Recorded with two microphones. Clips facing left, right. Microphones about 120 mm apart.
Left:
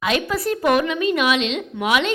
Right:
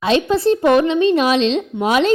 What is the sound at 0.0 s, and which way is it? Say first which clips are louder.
Speech: right 6 dB; 30° right (ahead or behind).